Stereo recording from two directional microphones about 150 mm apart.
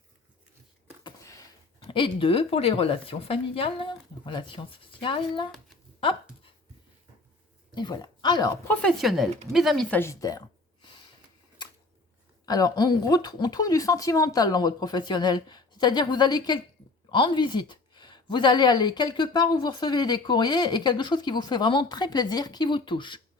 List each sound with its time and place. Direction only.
1.0 s a sound: 20° left (ahead or behind)
1.9 s a woman's voice: 35° left (ahead or behind)
7.8 s speech: 30° left (ahead or behind)
8.6 s speech: 10° left (ahead or behind)
10.0 s speech: 20° left (ahead or behind)
12.5 s speech: 25° left (ahead or behind)